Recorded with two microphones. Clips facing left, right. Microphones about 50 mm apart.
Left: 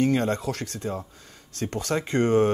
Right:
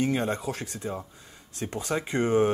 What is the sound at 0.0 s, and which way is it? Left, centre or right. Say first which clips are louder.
Speech: left 4 dB; centre.